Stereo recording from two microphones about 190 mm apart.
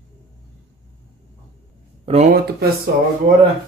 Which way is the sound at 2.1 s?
30° right (ahead or behind).